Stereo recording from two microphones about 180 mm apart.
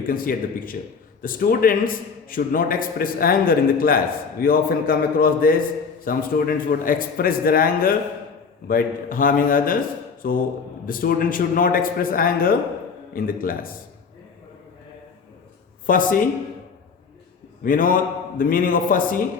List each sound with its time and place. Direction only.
0.1 s a man's voice: 50° left (ahead or behind)
15.9 s a man's voice: 50° left (ahead or behind)
17.6 s a man's voice: 50° left (ahead or behind)